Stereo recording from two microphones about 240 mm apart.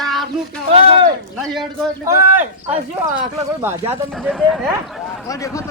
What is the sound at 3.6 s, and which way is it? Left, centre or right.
Speech, centre.